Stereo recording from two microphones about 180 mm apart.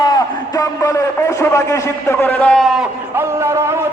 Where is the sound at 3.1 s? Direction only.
15° right (ahead or behind).